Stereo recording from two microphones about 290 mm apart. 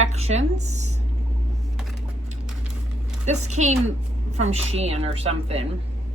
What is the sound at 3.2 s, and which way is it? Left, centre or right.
Speech, right.